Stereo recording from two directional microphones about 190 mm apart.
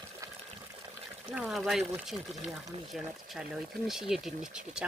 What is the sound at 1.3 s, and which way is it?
Speech, centre (ahead or behind).